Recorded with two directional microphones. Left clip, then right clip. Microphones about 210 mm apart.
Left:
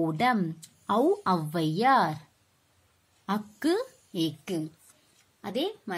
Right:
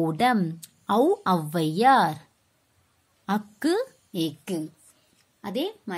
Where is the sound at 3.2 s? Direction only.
20° right (ahead or behind).